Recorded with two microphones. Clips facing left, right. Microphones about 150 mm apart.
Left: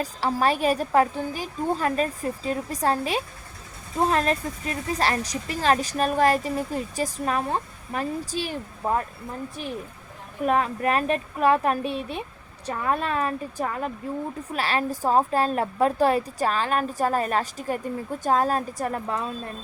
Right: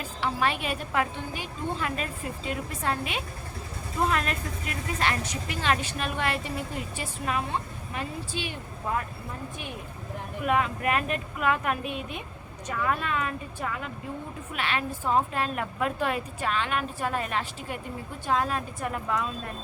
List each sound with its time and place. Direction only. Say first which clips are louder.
0.0 s speech: left 4 dB; 40° left (ahead or behind)
10.4 s speech: left 3 dB; 35° left (ahead or behind)